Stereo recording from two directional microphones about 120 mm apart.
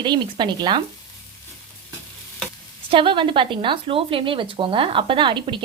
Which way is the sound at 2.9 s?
45° right (ahead or behind).